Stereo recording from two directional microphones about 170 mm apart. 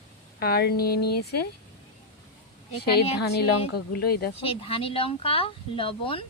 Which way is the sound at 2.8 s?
70° left (ahead or behind).